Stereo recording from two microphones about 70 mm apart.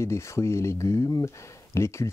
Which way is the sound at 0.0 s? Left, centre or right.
Left.